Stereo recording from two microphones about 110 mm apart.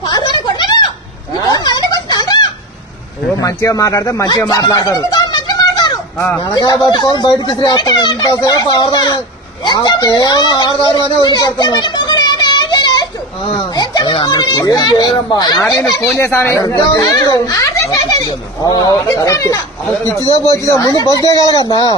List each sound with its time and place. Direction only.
0.0 s a sound: 40° left (ahead or behind)
3.3 s speech: 30° left (ahead or behind)
6.1 s speech: 20° left (ahead or behind)
6.4 s speech: 40° left (ahead or behind)
11.2 s a sound: 40° left (ahead or behind)
14.1 s speech: 45° left (ahead or behind)
16.1 s speech: 20° left (ahead or behind)
16.6 s speech: 35° left (ahead or behind)